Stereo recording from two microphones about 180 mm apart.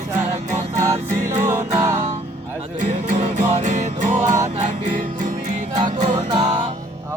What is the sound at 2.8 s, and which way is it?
Music, 40° right (ahead or behind).